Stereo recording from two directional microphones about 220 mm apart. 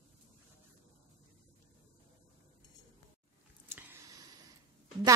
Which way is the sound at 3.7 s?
10° right (ahead or behind).